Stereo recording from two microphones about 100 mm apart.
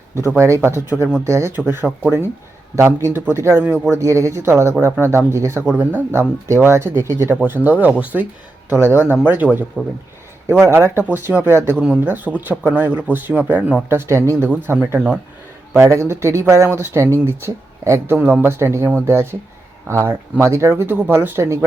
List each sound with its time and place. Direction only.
0.2 s speech: 25° right (ahead or behind)
10.5 s speech: 25° right (ahead or behind)
13.9 s speech: 30° right (ahead or behind)
18.2 s speech: 10° right (ahead or behind)
18.4 s speech: 25° right (ahead or behind)
20.4 s speech: 30° right (ahead or behind)